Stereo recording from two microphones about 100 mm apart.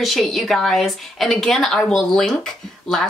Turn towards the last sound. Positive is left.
turn(degrees=5)  # may be behind; listen again after turning